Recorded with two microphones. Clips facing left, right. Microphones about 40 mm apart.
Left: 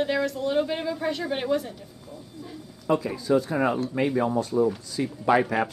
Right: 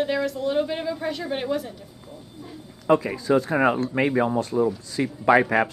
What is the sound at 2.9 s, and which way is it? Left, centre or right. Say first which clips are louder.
Speech: right 5 dB; right.